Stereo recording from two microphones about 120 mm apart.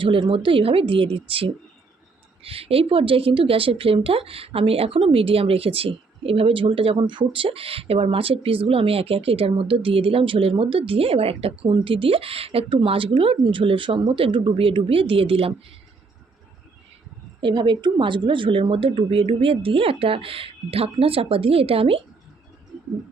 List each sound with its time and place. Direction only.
0.0 s speech: 45° right (ahead or behind)
17.4 s speech: 40° right (ahead or behind)